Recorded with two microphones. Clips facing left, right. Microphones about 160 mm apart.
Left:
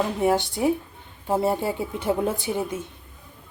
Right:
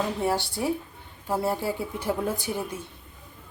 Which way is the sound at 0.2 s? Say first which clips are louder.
Left 5 dB; 20° left (ahead or behind).